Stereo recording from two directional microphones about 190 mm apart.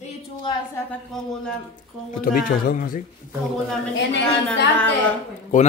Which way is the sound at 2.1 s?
45° left (ahead or behind).